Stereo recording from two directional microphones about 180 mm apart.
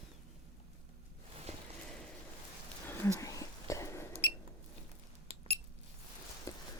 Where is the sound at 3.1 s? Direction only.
20° left (ahead or behind).